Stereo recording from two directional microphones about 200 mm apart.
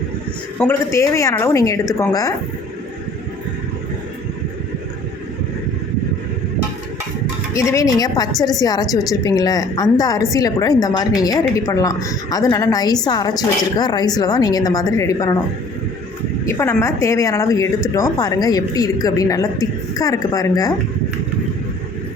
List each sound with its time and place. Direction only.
0.6 s speech: 15° left (ahead or behind)
7.5 s a woman's voice: 15° left (ahead or behind)
16.5 s speech: 15° left (ahead or behind)